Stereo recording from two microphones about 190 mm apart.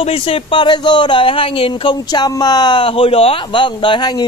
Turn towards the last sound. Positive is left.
turn(degrees=20)  # may be behind; listen again after turning